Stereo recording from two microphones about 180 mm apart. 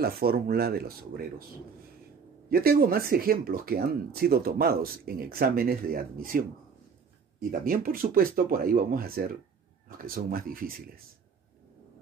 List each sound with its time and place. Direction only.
0.0 s speech: 60° right (ahead or behind)
2.5 s speech: 55° right (ahead or behind)
7.6 s speech: 55° right (ahead or behind)